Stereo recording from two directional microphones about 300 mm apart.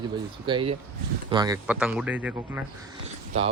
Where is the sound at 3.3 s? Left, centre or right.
Centre.